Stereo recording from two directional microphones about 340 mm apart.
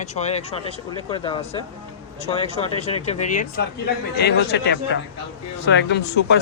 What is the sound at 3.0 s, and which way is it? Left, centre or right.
Speech, left.